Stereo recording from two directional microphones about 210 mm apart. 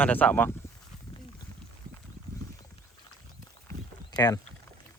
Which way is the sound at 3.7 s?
15° left (ahead or behind).